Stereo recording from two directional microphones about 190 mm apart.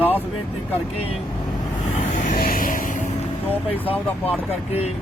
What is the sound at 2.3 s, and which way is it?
Vehicle, 50° left (ahead or behind).